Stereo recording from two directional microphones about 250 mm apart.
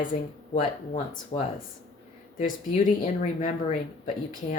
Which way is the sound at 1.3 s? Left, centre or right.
Left.